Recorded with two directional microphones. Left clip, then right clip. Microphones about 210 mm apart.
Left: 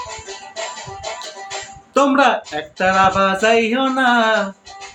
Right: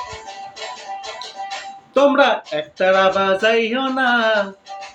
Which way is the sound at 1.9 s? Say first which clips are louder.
Even; 20° left (ahead or behind).